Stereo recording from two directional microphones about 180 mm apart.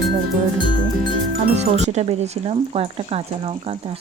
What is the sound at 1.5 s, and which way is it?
Speech, 40° right (ahead or behind).